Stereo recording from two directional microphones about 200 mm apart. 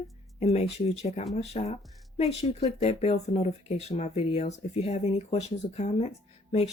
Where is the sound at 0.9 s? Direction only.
30° left (ahead or behind).